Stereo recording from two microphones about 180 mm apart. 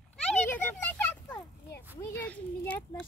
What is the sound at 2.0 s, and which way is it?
Children playing, 10° left (ahead or behind).